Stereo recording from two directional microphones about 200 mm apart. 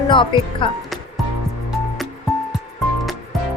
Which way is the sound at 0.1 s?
25° left (ahead or behind).